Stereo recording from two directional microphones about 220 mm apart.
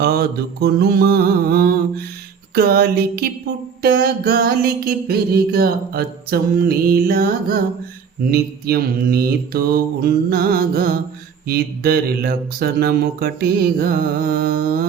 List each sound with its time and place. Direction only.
0.0 s music: 45° right (ahead or behind)